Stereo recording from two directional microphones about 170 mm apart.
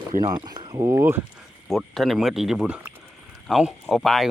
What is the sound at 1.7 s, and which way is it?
Speech, centre (ahead or behind).